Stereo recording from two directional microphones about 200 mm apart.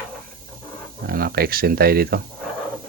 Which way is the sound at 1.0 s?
50° right (ahead or behind).